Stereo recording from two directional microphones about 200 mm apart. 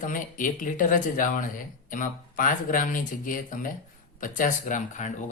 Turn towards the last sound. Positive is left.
turn(degrees=40)  # may be behind; listen again after turning